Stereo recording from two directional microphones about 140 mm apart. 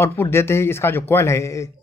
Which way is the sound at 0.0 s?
15° left (ahead or behind).